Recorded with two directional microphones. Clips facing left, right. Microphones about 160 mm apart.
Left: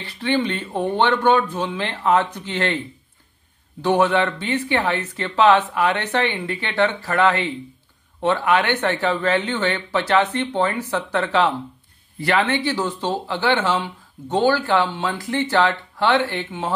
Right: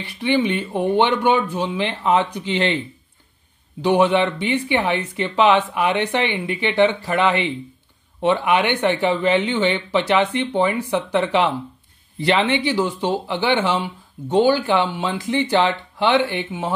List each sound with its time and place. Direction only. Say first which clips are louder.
0.0 s speech: right 2 dB; 10° right (ahead or behind)
3.8 s speech: right 2 dB; 15° right (ahead or behind)